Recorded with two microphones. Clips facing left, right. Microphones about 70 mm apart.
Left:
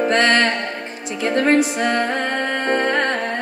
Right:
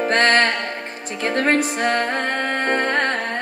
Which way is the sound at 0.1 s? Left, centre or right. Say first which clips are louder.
Right 1 dB; right.